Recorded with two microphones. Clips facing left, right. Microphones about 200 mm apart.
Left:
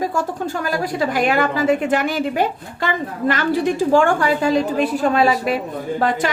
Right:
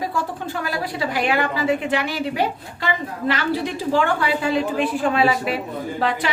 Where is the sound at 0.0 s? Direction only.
45° left (ahead or behind).